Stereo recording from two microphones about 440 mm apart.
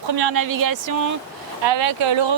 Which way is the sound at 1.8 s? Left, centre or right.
Right.